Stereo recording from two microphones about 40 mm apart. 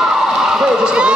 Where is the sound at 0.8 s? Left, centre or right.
Right.